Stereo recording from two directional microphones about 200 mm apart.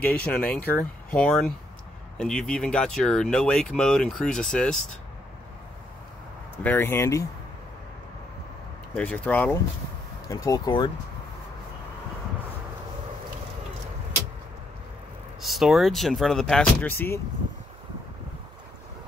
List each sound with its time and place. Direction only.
0.0 s speech: 5° left (ahead or behind)
6.6 s speech: 10° left (ahead or behind)
8.9 s speech: 5° left (ahead or behind)
15.4 s speech: centre (ahead or behind)